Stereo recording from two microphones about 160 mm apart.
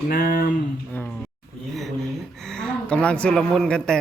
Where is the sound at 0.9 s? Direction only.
10° left (ahead or behind).